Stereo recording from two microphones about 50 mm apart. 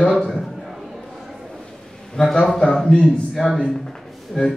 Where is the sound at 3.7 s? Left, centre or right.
Centre.